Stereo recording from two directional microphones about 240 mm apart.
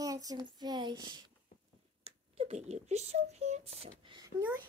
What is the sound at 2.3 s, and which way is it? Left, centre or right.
Speech, right.